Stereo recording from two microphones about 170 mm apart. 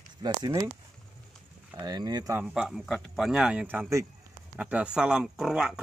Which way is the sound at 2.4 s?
5° right (ahead or behind).